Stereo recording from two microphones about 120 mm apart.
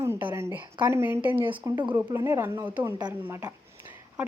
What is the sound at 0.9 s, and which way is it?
Speech, 20° right (ahead or behind).